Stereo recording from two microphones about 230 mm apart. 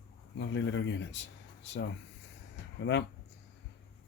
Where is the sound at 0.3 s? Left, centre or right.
Left.